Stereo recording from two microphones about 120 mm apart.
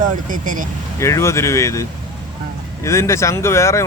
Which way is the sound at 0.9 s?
25° left (ahead or behind).